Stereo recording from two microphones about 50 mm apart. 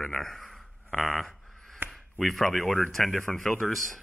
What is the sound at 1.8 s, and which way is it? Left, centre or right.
Chop, right.